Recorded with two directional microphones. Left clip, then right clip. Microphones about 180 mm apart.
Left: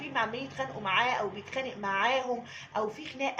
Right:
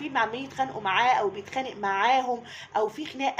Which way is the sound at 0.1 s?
50° right (ahead or behind).